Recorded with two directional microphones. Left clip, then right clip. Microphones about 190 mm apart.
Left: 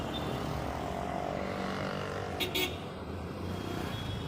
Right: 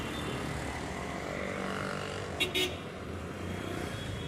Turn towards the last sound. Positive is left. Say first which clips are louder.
# right 1 dB
turn(degrees=30)  # may be behind; listen again after turning